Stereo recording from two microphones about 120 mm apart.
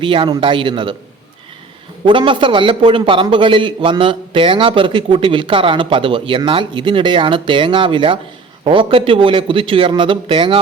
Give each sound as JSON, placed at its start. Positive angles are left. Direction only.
{"t": 0.0, "sound": "a man's voice", "side_deg": -45}
{"t": 2.0, "sound": "a man's voice", "side_deg": -45}